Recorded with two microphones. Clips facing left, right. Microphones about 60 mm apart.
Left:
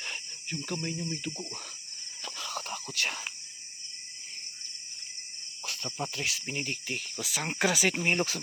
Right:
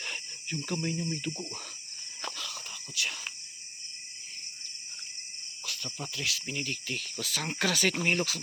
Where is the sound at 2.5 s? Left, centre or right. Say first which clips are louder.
Left 6 dB; left.